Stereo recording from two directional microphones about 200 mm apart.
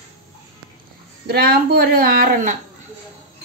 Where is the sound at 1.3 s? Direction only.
50° right (ahead or behind).